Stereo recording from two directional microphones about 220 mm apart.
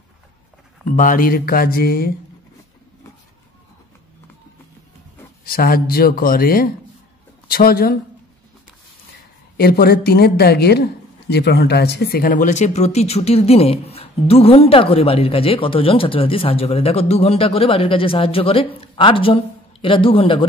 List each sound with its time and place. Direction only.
0.8 s speech: 35° left (ahead or behind)
5.4 s speech: 40° left (ahead or behind)
9.6 s speech: 45° left (ahead or behind); by 20.4 s 25° left (ahead or behind)